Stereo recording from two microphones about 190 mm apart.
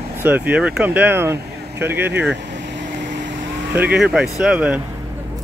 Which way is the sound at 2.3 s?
70° right (ahead or behind).